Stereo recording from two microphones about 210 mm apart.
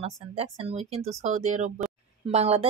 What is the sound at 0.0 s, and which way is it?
A woman's voice, 30° right (ahead or behind).